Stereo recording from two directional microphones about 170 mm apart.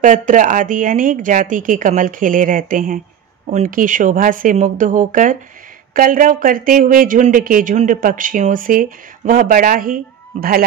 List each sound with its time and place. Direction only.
0.0 s speech: 50° right (ahead or behind)
10.3 s speech: 45° right (ahead or behind)